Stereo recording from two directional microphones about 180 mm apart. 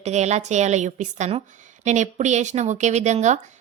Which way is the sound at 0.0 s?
40° right (ahead or behind).